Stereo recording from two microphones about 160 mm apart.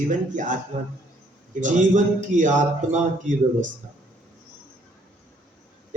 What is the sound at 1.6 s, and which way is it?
A man's voice, 50° right (ahead or behind).